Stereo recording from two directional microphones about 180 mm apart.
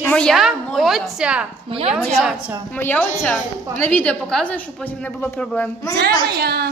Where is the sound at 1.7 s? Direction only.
30° right (ahead or behind).